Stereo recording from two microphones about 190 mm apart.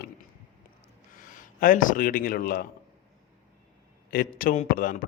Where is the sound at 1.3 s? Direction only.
45° left (ahead or behind).